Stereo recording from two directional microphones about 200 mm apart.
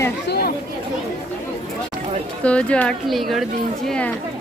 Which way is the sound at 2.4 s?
5° left (ahead or behind).